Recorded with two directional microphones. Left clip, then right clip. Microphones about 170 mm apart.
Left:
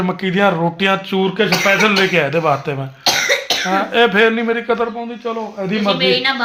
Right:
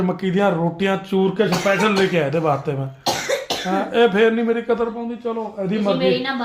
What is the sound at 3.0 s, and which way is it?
Cough, 25° right (ahead or behind).